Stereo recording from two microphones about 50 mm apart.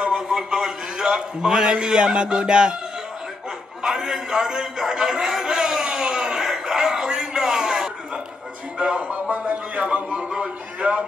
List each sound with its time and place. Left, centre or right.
0.0 s a man's voice: centre
3.8 s a sound: centre
8.7 s speech: right
10.0 s music: centre